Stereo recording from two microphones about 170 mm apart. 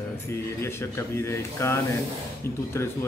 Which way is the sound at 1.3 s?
15° left (ahead or behind).